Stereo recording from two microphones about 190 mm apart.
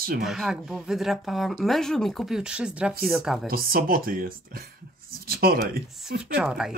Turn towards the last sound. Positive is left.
turn(degrees=-5)  # may be behind; listen again after turning